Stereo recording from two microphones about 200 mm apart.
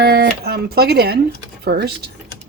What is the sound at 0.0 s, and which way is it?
A woman's voice, 50° right (ahead or behind).